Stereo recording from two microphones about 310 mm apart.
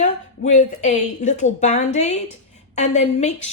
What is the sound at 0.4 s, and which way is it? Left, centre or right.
A woman's voice, left.